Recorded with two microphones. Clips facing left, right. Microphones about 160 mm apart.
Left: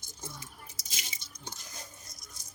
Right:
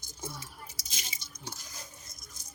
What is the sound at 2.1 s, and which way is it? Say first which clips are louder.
Patter: even; 35° left (ahead or behind).